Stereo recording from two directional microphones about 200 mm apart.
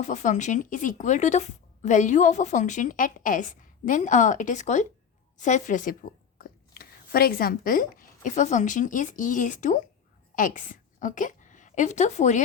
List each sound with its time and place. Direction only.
0.0 s a woman's voice: 35° left (ahead or behind)